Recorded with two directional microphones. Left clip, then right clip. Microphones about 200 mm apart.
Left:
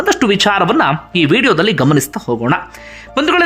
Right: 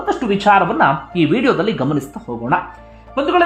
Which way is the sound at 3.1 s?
25° left (ahead or behind).